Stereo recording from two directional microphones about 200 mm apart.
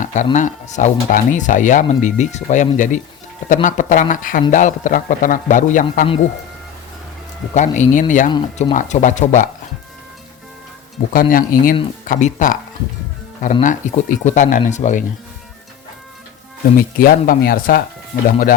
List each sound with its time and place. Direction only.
0.0 s a sound: 40° left (ahead or behind)
0.3 s speech: 40° left (ahead or behind)
7.5 s speech: 35° left (ahead or behind)
11.1 s speech: 45° left (ahead or behind)
16.7 s speech: 45° left (ahead or behind)